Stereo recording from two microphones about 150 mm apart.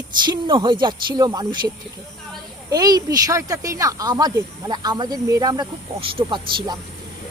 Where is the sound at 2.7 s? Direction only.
25° right (ahead or behind).